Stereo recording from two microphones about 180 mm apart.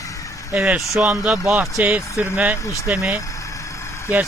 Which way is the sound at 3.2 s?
15° left (ahead or behind).